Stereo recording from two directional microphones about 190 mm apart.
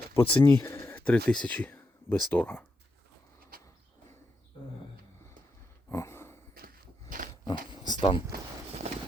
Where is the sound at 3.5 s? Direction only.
50° right (ahead or behind).